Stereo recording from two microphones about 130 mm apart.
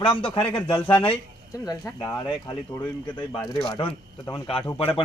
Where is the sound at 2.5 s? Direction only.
40° left (ahead or behind).